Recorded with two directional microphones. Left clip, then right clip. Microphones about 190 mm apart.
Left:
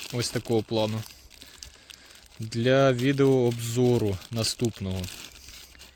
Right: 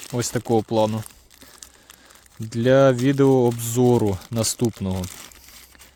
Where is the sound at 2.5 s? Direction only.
40° right (ahead or behind).